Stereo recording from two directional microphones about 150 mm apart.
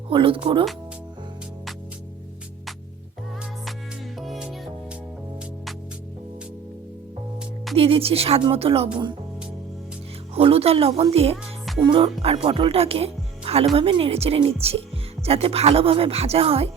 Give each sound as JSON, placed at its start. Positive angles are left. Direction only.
{"t": 0.1, "sound": "speech", "side_deg": -35}
{"t": 4.2, "sound": "music", "side_deg": 0}
{"t": 7.8, "sound": "speech", "side_deg": -40}
{"t": 10.3, "sound": "speech", "side_deg": -40}
{"t": 11.1, "sound": "music", "side_deg": -40}
{"t": 11.8, "sound": "speech", "side_deg": -35}